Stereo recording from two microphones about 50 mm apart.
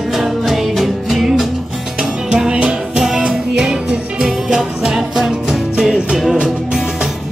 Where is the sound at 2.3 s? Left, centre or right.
Centre.